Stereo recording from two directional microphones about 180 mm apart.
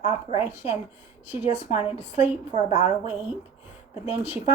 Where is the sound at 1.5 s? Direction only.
35° left (ahead or behind).